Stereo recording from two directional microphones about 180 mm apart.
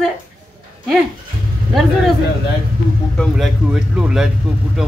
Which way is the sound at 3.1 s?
Centre (ahead or behind).